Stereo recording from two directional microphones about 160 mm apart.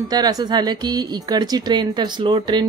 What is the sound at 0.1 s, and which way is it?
A woman's voice, 25° right (ahead or behind).